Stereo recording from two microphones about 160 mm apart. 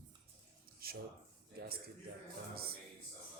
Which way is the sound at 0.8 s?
70° right (ahead or behind).